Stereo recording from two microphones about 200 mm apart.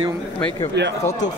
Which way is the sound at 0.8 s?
60° right (ahead or behind).